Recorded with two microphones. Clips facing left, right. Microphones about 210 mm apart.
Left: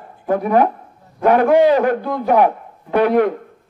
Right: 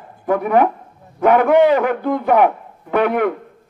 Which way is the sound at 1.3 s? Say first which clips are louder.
Even; 35° left (ahead or behind).